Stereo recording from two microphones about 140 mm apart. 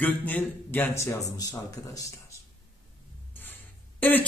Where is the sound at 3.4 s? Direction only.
15° left (ahead or behind).